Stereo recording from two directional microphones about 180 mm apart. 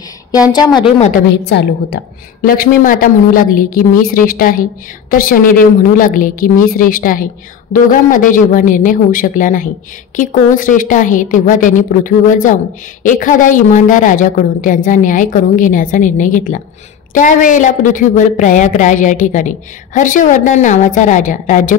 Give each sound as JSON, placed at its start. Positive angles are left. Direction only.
{"t": 1.5, "sound": "a woman's voice", "side_deg": 70}
{"t": 2.4, "sound": "a woman's voice", "side_deg": 55}